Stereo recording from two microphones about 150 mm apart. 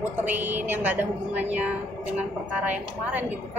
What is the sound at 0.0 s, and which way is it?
A woman's voice, 10° right (ahead or behind).